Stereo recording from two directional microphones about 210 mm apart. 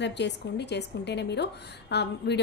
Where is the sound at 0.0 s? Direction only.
55° left (ahead or behind).